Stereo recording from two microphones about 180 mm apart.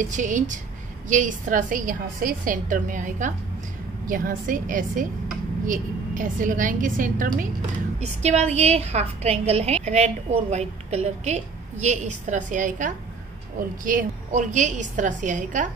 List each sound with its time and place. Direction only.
0.0 s a woman's voice: 45° right (ahead or behind)
8.0 s a woman's voice: 35° right (ahead or behind)